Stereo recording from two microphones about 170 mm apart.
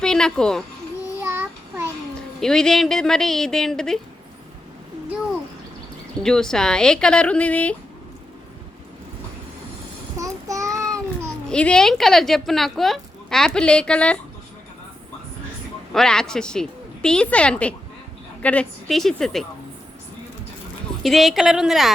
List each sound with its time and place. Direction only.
0.0 s a sound: 5° left (ahead or behind)
1.2 s child singing: 15° right (ahead or behind)
2.4 s speech: 5° left (ahead or behind)
6.2 s speech: 5° left (ahead or behind)
10.2 s child singing: 20° right (ahead or behind)
11.4 s speech: 5° left (ahead or behind)
15.9 s speech: 5° left (ahead or behind)
21.0 s speech: centre (ahead or behind)